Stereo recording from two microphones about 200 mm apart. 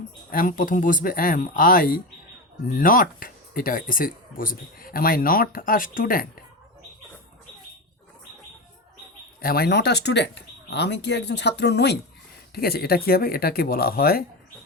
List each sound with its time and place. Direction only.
0.3 s speech: 45° left (ahead or behind)
9.4 s speech: 50° left (ahead or behind)